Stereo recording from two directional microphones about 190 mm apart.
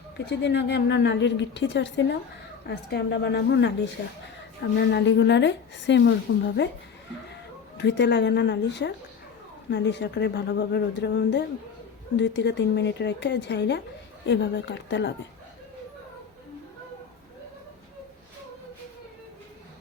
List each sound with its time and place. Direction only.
0.3 s a woman's voice: 65° left (ahead or behind)
7.8 s a woman's voice: 65° left (ahead or behind)